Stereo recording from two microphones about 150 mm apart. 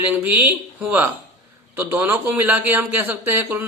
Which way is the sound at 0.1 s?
10° right (ahead or behind).